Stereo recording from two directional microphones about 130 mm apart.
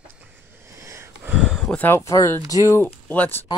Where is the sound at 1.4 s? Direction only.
5° left (ahead or behind).